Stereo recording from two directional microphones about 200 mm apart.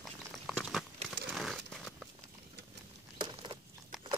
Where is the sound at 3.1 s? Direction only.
25° right (ahead or behind).